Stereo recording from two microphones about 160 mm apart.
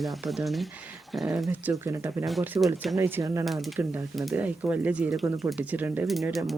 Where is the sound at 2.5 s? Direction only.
Centre (ahead or behind).